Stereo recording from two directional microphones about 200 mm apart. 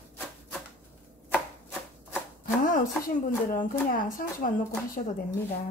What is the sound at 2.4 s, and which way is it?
A woman's voice, 45° left (ahead or behind).